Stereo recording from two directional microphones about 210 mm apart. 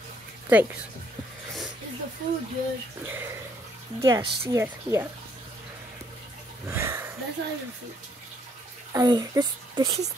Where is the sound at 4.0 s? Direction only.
15° right (ahead or behind).